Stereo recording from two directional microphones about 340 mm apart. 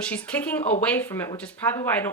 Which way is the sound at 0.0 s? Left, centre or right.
Centre.